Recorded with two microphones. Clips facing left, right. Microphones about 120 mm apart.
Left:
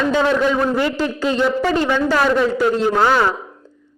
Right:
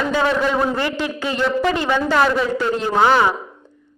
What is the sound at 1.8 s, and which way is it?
Speech, 15° right (ahead or behind).